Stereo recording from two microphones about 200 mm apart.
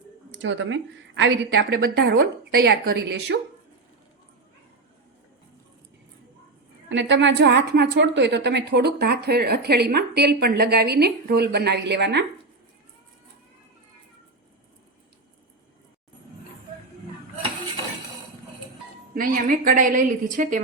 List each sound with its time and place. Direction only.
0.3 s a woman's voice: 65° right (ahead or behind)
6.8 s a woman's voice: 65° right (ahead or behind)
19.1 s a woman's voice: 45° right (ahead or behind)